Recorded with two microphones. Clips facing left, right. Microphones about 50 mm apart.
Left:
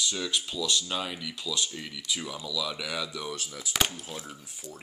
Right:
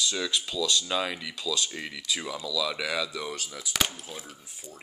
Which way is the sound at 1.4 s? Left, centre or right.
Right.